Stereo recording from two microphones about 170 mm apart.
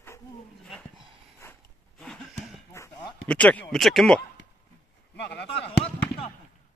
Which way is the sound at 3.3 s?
10° left (ahead or behind).